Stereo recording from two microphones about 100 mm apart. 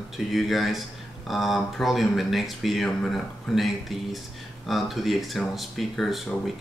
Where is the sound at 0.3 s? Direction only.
Centre (ahead or behind).